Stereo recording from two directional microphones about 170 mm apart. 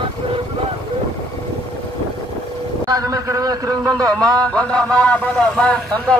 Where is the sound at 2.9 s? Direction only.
20° right (ahead or behind).